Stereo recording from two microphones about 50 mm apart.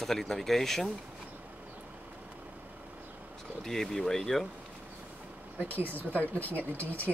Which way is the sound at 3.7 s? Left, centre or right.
Centre.